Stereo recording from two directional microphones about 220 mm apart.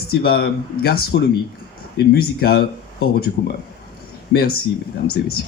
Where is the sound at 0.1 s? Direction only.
45° left (ahead or behind).